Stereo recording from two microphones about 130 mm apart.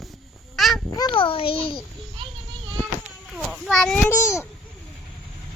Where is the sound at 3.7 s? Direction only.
5° left (ahead or behind).